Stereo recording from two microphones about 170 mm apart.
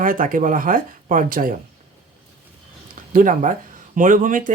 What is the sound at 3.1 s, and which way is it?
Speech, 50° right (ahead or behind).